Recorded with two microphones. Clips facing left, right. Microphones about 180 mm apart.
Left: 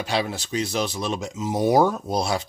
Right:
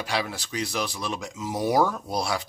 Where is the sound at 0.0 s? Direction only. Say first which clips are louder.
Left 4 dB; 25° left (ahead or behind).